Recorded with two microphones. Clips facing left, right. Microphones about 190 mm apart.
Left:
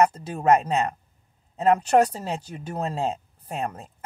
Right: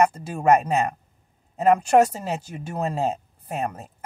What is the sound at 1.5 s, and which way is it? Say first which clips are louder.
Speech: right 2 dB; 10° right (ahead or behind).